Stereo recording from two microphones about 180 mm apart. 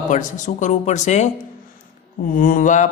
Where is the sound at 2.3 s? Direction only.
50° left (ahead or behind).